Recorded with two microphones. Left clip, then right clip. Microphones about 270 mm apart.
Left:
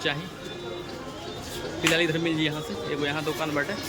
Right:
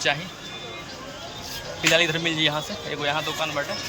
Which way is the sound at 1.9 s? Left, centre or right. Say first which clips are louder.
Right 6 dB; centre.